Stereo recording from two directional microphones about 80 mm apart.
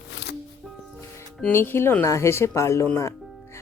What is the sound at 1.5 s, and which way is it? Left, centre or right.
Speech, left.